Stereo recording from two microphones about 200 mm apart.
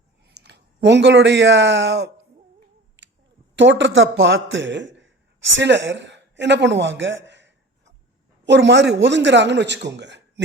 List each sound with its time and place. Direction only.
0.4 s speech: 60° right (ahead or behind)
3.0 s a sound: 65° right (ahead or behind)
3.5 s a man's voice: 65° right (ahead or behind)